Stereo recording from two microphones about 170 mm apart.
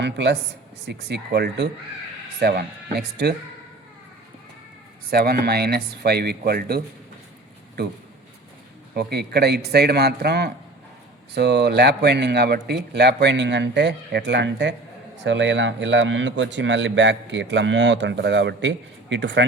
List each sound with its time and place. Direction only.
0.0 s a man's voice: 90° right
0.9 s speech: 80° right
2.4 s speech: 70° right (ahead or behind)
5.1 s speech: 65° right (ahead or behind)
9.0 s a man's voice: 70° right (ahead or behind); by 19.5 s 90° right